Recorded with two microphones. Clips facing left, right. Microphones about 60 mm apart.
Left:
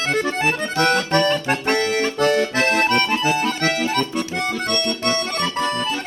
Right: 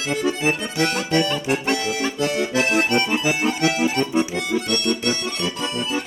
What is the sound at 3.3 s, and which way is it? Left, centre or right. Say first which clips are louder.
Accordion: left 1 dB; centre.